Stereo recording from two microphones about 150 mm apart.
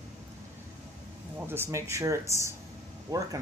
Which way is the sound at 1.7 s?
20° right (ahead or behind).